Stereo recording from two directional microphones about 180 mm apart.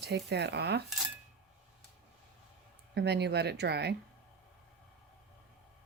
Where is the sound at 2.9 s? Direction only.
70° right (ahead or behind).